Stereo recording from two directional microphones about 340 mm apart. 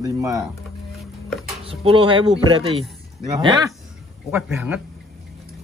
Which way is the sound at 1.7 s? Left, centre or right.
Centre.